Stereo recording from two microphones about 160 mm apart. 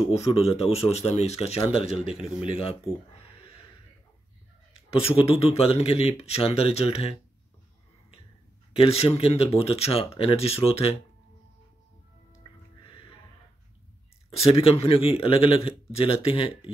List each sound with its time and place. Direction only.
0.1 s speech: 40° left (ahead or behind)
4.7 s speech: 35° left (ahead or behind)
8.7 s speech: 40° left (ahead or behind)
14.3 s speech: 35° left (ahead or behind)